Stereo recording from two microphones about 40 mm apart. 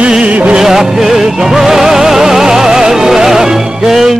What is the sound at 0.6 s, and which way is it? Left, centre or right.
Music, centre.